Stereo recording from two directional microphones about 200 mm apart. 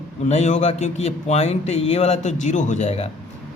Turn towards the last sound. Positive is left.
turn(degrees=35)  # may be behind; listen again after turning